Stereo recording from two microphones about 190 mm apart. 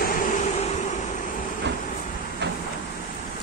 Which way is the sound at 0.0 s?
50° left (ahead or behind).